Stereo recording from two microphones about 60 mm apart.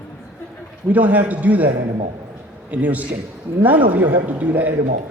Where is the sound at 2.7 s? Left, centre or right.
Right.